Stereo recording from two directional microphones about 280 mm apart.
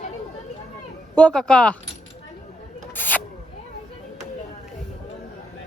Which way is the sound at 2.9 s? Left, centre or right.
Centre.